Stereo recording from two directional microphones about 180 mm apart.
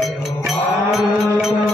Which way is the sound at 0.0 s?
Centre (ahead or behind).